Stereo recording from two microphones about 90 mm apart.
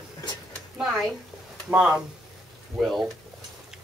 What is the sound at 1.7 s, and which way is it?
Speech, 10° right (ahead or behind).